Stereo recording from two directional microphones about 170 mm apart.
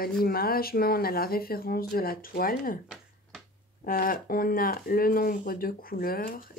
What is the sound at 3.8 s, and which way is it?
Speech, 55° left (ahead or behind).